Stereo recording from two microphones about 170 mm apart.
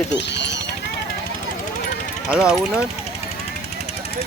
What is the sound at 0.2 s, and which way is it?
Speech, 90° left.